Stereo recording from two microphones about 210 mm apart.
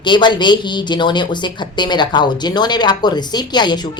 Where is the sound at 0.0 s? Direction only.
20° left (ahead or behind).